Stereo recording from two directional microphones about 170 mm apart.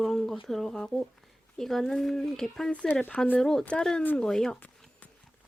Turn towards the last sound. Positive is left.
turn(degrees=5)  # may be behind; listen again after turning